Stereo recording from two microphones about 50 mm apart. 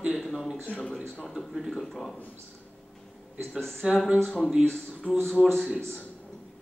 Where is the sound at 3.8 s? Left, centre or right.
Centre.